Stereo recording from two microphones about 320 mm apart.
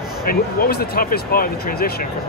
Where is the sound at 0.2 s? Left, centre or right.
Left.